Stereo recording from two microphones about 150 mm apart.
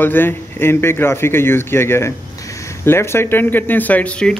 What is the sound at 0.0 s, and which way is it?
Speech, 15° left (ahead or behind).